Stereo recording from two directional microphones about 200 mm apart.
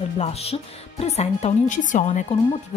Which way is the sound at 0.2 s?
30° left (ahead or behind).